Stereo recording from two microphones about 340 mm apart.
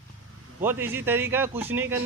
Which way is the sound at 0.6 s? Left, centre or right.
Centre.